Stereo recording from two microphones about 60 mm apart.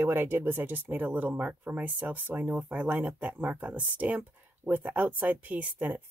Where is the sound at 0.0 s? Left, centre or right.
Right.